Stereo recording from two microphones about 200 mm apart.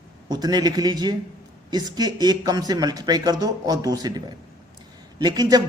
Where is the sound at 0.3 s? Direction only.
20° right (ahead or behind).